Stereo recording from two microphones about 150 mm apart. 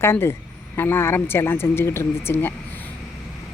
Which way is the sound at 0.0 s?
15° left (ahead or behind).